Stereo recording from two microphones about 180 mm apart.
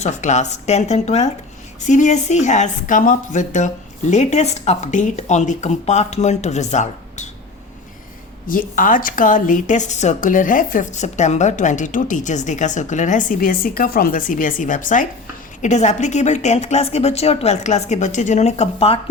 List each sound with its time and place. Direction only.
0.0 s speech: 40° left (ahead or behind)
8.4 s a woman's voice: 50° left (ahead or behind)